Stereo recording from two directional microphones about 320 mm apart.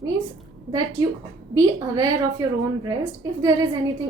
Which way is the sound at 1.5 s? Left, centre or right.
Centre.